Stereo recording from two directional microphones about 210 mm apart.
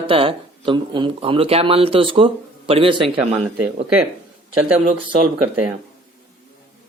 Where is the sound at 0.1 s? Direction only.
25° right (ahead or behind).